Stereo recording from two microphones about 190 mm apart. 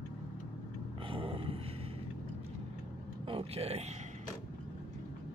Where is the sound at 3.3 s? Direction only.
30° right (ahead or behind).